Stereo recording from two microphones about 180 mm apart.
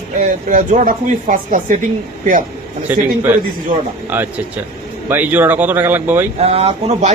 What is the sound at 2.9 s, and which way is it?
Speech, 10° right (ahead or behind).